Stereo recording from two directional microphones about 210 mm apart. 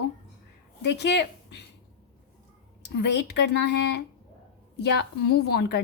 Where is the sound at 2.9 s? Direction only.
55° left (ahead or behind).